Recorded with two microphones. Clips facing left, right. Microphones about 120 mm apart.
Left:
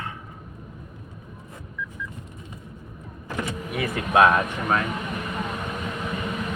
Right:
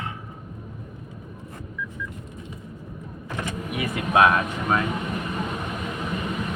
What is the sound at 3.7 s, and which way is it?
Speech, 15° right (ahead or behind).